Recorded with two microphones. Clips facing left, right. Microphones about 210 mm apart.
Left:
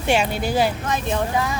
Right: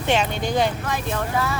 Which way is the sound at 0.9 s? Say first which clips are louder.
Left 3 dB; 20° left (ahead or behind).